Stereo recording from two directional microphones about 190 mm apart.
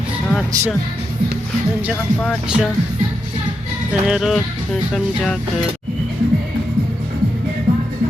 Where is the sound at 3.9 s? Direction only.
5° right (ahead or behind).